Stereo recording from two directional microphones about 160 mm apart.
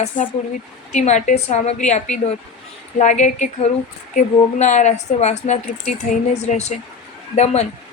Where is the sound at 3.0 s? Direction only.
50° left (ahead or behind).